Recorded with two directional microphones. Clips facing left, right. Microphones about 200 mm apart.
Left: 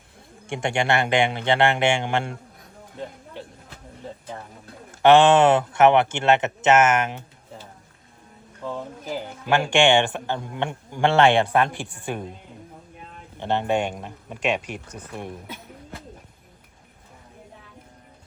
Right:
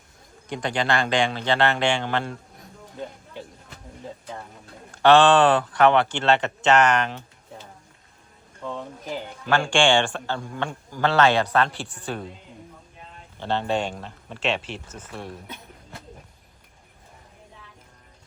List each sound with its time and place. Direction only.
0.6 s speech: 25° left (ahead or behind)
4.0 s speech: centre (ahead or behind)
4.9 s speech: 20° left (ahead or behind)
8.6 s speech: 5° left (ahead or behind)
9.5 s speech: 20° left (ahead or behind)
13.4 s speech: 15° left (ahead or behind)